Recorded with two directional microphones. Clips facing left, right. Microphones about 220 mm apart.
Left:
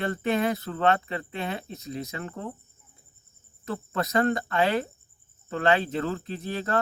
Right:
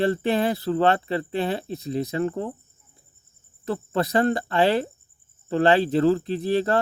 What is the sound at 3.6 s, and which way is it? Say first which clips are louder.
Cricket: right 5 dB; 35° right (ahead or behind).